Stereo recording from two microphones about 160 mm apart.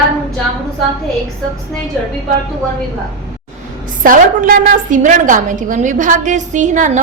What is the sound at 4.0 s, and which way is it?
A woman's voice, 60° right (ahead or behind).